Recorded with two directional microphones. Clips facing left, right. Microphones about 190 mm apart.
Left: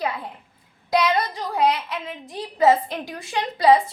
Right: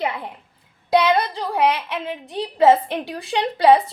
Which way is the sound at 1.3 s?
30° right (ahead or behind).